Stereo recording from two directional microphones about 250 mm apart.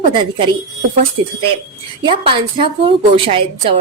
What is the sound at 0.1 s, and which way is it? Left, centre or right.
Speech, centre.